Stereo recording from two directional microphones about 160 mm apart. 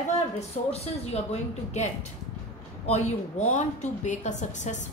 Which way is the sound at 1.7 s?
45° left (ahead or behind).